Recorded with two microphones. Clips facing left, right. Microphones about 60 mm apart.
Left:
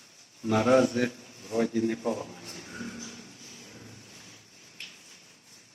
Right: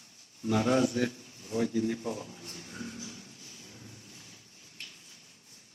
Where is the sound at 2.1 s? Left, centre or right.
Left.